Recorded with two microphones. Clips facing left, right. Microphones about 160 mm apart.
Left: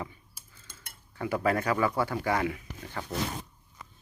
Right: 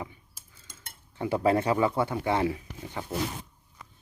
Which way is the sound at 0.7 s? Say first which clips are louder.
Right 2 dB; 25° right (ahead or behind).